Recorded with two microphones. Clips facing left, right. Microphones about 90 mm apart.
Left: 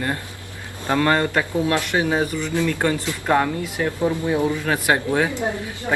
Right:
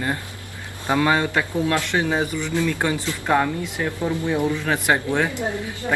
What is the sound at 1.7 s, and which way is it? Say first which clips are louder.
Speech: left 1 dB; 10° left (ahead or behind).